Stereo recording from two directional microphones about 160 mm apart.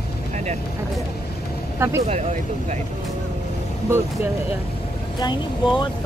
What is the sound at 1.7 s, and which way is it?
Speech, 15° right (ahead or behind).